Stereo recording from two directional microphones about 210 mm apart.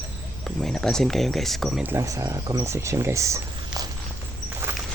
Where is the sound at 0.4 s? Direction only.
Centre (ahead or behind); by 3.8 s 15° right (ahead or behind).